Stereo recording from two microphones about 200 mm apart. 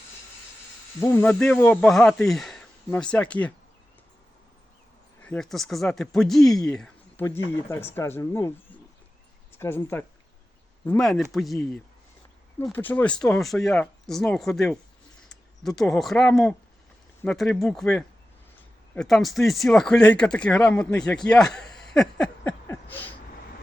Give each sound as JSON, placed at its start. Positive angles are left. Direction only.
{"t": 0.9, "sound": "speech", "side_deg": 15}
{"t": 5.2, "sound": "speech", "side_deg": 5}
{"t": 21.9, "sound": "a sound", "side_deg": 5}